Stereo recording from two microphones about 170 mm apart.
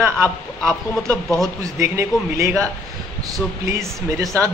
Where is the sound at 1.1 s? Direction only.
5° left (ahead or behind).